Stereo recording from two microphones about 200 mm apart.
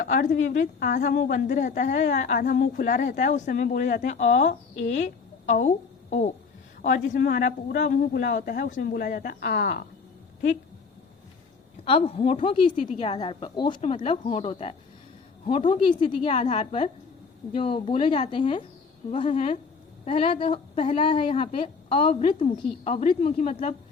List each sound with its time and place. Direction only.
0.0 s a woman's voice: 45° left (ahead or behind)
11.9 s a woman's voice: 30° left (ahead or behind)